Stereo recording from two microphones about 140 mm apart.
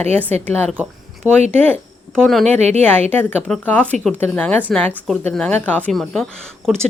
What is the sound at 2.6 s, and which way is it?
Speech, 50° right (ahead or behind).